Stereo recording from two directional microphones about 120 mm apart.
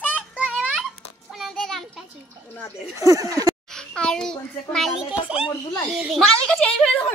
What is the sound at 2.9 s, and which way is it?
Speech, 25° right (ahead or behind).